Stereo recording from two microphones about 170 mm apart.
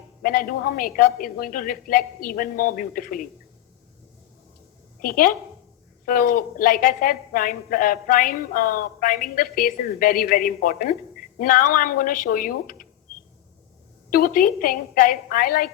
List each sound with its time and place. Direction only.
0.2 s a woman's voice: 55° left (ahead or behind)
5.0 s a woman's voice: 55° left (ahead or behind)
14.1 s a woman's voice: 55° left (ahead or behind)